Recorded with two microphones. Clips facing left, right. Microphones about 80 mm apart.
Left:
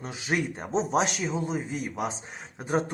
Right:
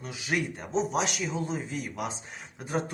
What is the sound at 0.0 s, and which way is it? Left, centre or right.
Speech, left.